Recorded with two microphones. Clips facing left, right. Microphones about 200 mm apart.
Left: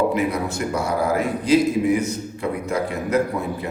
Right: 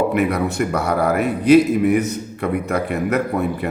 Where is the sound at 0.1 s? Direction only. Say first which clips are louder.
Right 3 dB; 60° right (ahead or behind).